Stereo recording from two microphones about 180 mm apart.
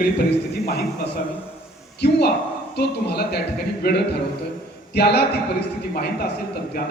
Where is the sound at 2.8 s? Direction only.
65° left (ahead or behind).